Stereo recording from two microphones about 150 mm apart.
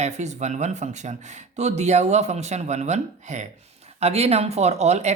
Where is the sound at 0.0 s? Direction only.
50° right (ahead or behind).